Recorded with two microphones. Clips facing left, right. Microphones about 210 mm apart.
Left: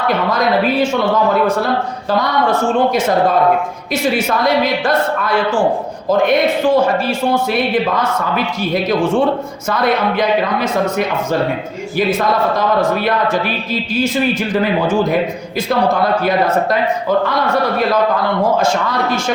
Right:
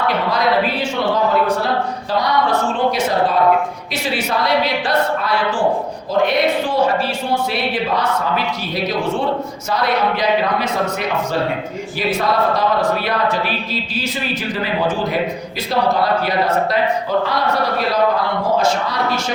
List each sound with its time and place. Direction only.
0.3 s a woman's voice: 45° left (ahead or behind)
2.0 s a woman's voice: 50° left (ahead or behind)
3.9 s a woman's voice: 45° left (ahead or behind)
9.6 s a woman's voice: 50° left (ahead or behind)
14.6 s a woman's voice: 50° left (ahead or behind)
18.6 s a woman's voice: 50° left (ahead or behind)